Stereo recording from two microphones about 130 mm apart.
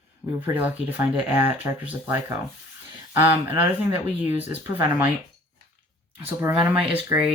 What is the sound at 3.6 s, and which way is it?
Speech, 15° right (ahead or behind).